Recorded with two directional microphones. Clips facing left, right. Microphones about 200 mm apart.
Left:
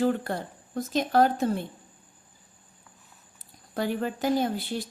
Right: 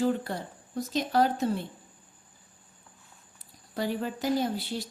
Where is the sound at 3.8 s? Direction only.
55° left (ahead or behind).